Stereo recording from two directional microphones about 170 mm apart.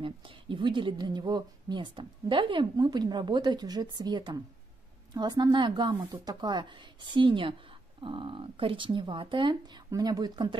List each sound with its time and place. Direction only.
0.0 s a woman's voice: 30° right (ahead or behind)